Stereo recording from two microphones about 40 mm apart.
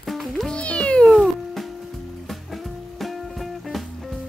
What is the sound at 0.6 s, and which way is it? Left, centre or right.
Cat, left.